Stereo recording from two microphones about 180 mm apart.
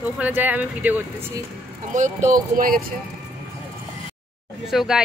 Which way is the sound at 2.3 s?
50° right (ahead or behind).